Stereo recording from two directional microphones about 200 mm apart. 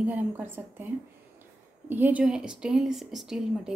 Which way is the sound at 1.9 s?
10° right (ahead or behind).